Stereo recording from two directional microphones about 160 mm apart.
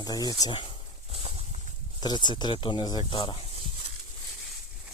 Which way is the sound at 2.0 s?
25° left (ahead or behind).